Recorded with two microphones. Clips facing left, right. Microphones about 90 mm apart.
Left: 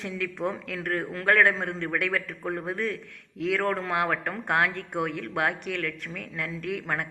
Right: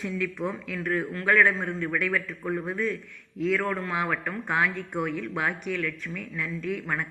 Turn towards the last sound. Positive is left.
turn(degrees=70)  # may be behind; listen again after turning